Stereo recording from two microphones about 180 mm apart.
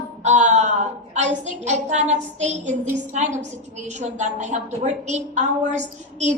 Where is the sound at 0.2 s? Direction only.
40° right (ahead or behind).